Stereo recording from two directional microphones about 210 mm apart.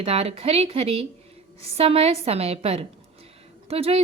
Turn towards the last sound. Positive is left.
turn(degrees=-30)  # may be behind; listen again after turning